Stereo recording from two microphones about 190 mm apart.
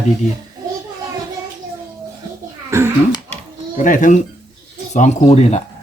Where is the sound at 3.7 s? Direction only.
45° left (ahead or behind).